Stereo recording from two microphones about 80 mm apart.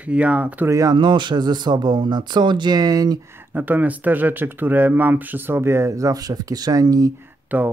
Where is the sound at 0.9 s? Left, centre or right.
Right.